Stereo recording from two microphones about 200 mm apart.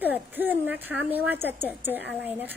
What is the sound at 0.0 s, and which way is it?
A woman's voice, 10° right (ahead or behind).